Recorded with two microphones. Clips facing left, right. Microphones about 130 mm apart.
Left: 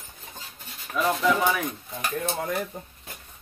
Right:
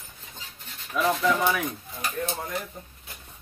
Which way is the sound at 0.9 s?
Centre (ahead or behind).